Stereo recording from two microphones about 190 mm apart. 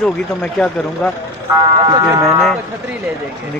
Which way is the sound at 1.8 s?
20° right (ahead or behind).